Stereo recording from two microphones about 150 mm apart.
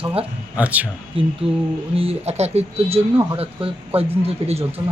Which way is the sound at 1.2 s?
35° right (ahead or behind).